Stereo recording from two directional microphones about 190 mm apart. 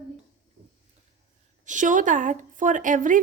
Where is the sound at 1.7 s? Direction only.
40° right (ahead or behind).